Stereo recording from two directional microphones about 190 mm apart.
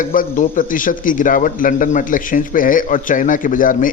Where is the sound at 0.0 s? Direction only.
45° left (ahead or behind).